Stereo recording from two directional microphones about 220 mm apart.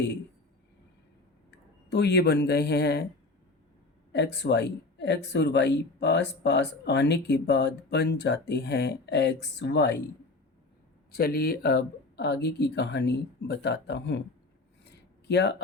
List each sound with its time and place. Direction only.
1.5 s speech: 50° left (ahead or behind)
4.1 s speech: 50° left (ahead or behind)
11.1 s speech: 45° left (ahead or behind)
15.3 s speech: 50° left (ahead or behind)